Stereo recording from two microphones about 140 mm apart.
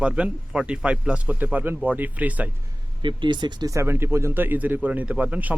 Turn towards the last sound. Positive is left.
turn(degrees=-10)  # may be behind; listen again after turning